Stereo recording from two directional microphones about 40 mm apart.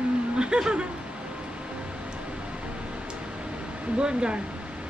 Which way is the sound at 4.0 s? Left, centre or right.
Right.